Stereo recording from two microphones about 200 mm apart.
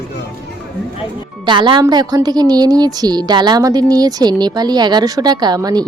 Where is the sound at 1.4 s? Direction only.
25° right (ahead or behind).